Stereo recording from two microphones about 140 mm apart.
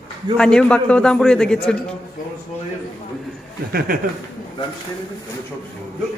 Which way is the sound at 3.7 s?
90° right.